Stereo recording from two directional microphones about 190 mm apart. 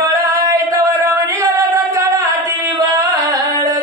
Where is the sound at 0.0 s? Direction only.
15° right (ahead or behind).